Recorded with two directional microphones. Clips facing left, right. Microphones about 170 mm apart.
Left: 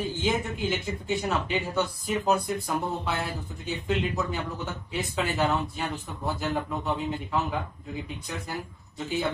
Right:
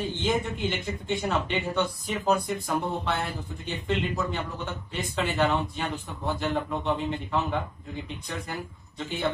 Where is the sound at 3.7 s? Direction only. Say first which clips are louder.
Left 1 dB; centre (ahead or behind).